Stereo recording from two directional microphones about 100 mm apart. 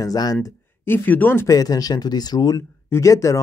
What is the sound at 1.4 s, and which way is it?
Speech, 40° left (ahead or behind).